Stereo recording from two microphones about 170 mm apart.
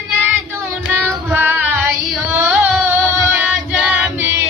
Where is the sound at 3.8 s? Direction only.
10° right (ahead or behind).